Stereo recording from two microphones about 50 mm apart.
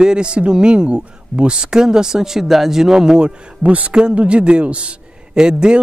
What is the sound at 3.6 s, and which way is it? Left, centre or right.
A man's voice, right.